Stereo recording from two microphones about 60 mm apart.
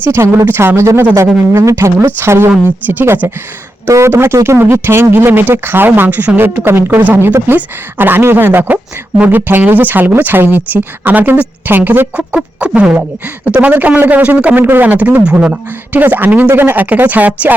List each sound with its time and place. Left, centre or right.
0.0 s speech: right
1.5 s speech: right
2.0 s speech: right
3.8 s speech: right
7.0 s speech: right
12.1 s speech: centre
14.5 s speech: right